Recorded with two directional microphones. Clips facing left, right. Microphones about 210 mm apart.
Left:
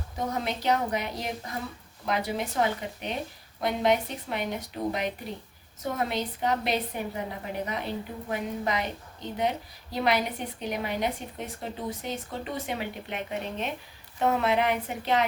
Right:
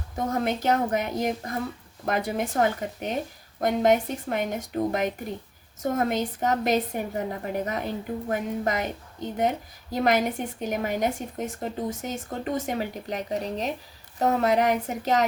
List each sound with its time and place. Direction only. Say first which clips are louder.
0.3 s a woman's voice: right 3 dB; 50° right (ahead or behind)